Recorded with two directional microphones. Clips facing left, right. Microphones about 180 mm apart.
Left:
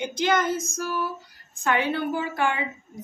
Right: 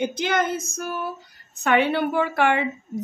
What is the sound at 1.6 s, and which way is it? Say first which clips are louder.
A woman's voice: right 4 dB; 70° right (ahead or behind).